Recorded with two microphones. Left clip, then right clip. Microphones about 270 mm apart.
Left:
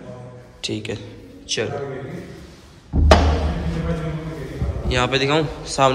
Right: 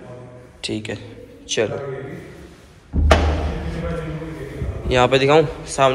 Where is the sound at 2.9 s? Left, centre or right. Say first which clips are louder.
Left 2 dB; centre.